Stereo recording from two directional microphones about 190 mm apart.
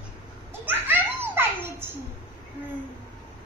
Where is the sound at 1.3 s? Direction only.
10° right (ahead or behind).